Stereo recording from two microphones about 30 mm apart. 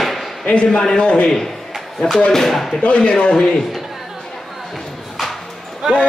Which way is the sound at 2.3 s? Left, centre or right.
Centre.